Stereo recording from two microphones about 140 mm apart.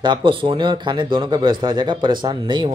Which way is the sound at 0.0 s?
35° right (ahead or behind).